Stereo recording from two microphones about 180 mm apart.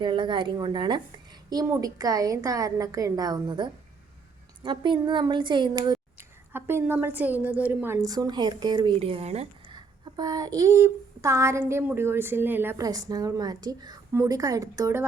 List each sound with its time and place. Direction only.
0.0 s a woman's voice: 25° right (ahead or behind)
6.1 s a woman's voice: 15° right (ahead or behind)